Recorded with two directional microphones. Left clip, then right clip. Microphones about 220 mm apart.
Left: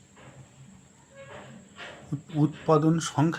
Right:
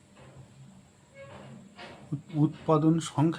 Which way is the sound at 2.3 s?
15° left (ahead or behind).